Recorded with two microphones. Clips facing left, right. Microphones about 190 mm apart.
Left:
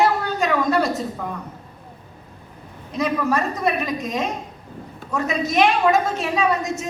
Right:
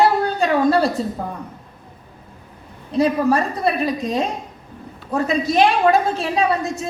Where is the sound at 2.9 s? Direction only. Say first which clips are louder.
Right 5 dB; 30° right (ahead or behind).